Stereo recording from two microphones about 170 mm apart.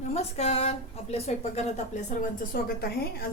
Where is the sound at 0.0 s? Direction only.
40° left (ahead or behind).